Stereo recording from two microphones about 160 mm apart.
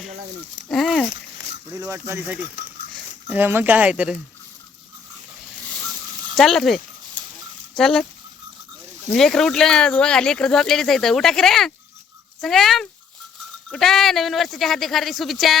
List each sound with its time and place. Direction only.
0.7 s speech: centre (ahead or behind)
1.9 s speech: 15° right (ahead or behind)
5.7 s a sound: centre (ahead or behind)
7.8 s speech: 5° left (ahead or behind)
9.1 s speech: 5° left (ahead or behind)